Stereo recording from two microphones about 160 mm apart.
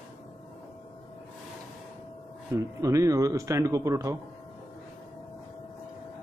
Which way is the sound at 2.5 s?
20° right (ahead or behind).